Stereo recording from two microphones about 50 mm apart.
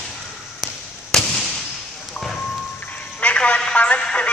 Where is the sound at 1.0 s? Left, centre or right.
Centre.